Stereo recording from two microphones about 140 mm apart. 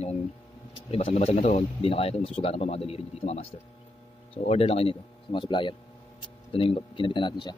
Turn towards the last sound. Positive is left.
turn(degrees=35)  # may be behind; listen again after turning